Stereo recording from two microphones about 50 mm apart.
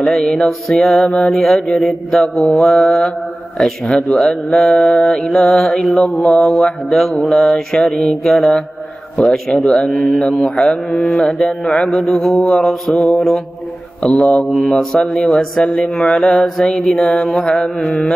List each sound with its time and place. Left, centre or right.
0.2 s mantra: centre
0.7 s a man's voice: centre
1.2 s mantra: centre
5.9 s mantra: left
9.1 s a man's voice: centre
9.8 s mantra: centre
10.2 s mantra: centre
14.6 s mantra: centre